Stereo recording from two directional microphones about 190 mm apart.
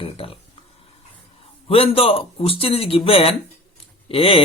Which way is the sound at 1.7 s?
30° left (ahead or behind).